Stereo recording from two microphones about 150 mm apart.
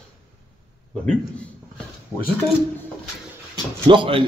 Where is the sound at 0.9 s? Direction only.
5° left (ahead or behind).